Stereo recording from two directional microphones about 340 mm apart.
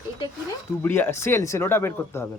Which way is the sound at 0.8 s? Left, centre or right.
Centre.